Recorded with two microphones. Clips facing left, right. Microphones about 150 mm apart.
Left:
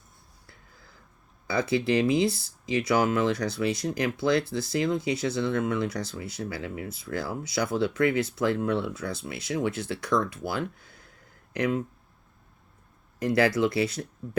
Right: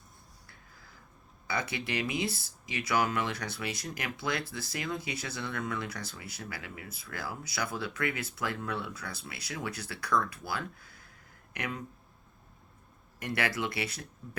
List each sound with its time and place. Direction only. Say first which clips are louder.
1.5 s speech: left 10 dB; 25° left (ahead or behind)
13.1 s speech: left 10 dB; 30° left (ahead or behind)